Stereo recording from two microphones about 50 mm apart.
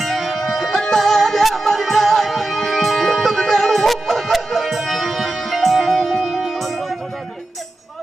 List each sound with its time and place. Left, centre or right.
0.0 s music: centre